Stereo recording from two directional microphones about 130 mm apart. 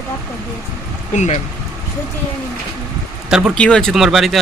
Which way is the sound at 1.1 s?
65° left (ahead or behind).